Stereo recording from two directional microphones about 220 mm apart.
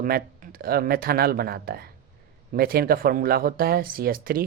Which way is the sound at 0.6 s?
45° right (ahead or behind).